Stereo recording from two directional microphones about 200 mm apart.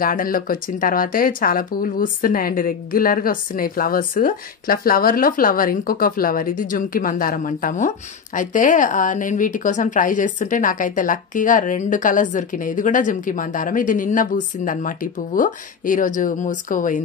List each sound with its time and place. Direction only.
0.0 s a woman's voice: 45° left (ahead or behind)